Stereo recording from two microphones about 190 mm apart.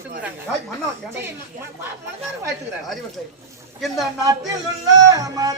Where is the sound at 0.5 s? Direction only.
5° left (ahead or behind).